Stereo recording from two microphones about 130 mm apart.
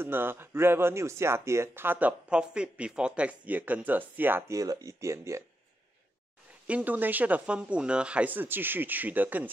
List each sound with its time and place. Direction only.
0.0 s speech: 15° right (ahead or behind)
6.7 s speech: 15° right (ahead or behind)